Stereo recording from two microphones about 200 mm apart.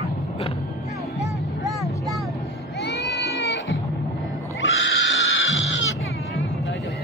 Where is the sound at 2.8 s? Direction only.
60° left (ahead or behind).